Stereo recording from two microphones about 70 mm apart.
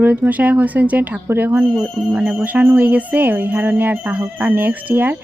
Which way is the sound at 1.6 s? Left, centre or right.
Centre.